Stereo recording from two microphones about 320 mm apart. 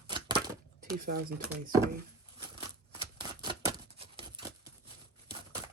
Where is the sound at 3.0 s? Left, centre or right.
Centre.